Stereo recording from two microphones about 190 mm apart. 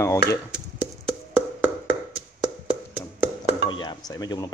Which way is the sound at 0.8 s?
5° right (ahead or behind).